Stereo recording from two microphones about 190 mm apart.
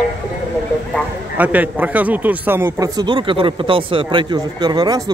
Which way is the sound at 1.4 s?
10° right (ahead or behind).